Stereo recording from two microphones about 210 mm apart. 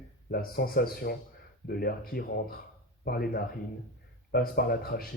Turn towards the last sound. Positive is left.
turn(degrees=45)  # may be behind; listen again after turning